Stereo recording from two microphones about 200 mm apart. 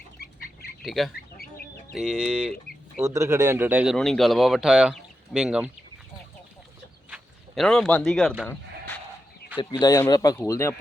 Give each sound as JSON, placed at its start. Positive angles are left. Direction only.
{"t": 0.2, "sound": "bird", "side_deg": 50}
{"t": 0.9, "sound": "speech", "side_deg": 0}
{"t": 1.1, "sound": "chicken", "side_deg": 50}
{"t": 2.0, "sound": "speech", "side_deg": -5}
{"t": 3.0, "sound": "speech", "side_deg": -15}
{"t": 3.9, "sound": "speech", "side_deg": 0}
{"t": 7.1, "sound": "a sound", "side_deg": 0}
{"t": 9.6, "sound": "speech", "side_deg": 20}